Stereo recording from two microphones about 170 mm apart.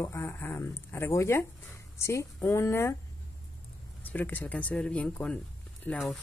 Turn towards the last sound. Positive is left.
turn(degrees=5)  # may be behind; listen again after turning